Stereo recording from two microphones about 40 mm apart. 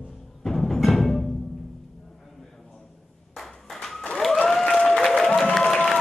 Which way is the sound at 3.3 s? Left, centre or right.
Centre.